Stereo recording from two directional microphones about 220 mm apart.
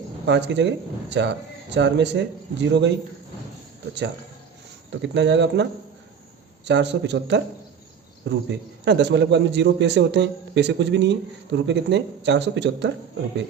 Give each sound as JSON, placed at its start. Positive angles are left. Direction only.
{"t": 0.3, "sound": "a man's voice", "side_deg": -50}
{"t": 4.9, "sound": "a man's voice", "side_deg": -55}
{"t": 6.7, "sound": "a man's voice", "side_deg": -50}